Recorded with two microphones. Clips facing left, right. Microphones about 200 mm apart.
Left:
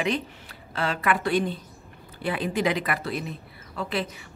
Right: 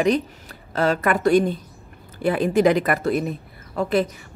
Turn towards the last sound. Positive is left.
turn(degrees=-45)  # may be behind; listen again after turning